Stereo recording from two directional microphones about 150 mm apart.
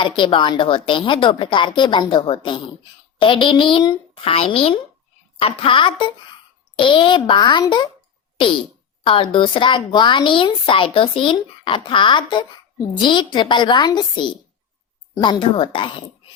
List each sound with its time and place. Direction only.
0.2 s a woman's voice: 35° left (ahead or behind)
8.4 s a sound: 35° left (ahead or behind)
9.0 s a woman's voice: 35° left (ahead or behind)